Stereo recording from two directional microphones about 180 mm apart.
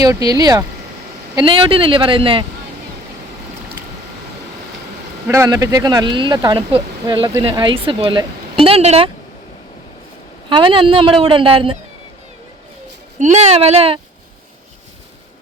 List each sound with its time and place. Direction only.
0.0 s speech: 20° right (ahead or behind)
5.3 s speech: 15° right (ahead or behind); by 9.0 s 35° right (ahead or behind)
10.5 s speech: 25° right (ahead or behind)
13.1 s speech: 40° right (ahead or behind)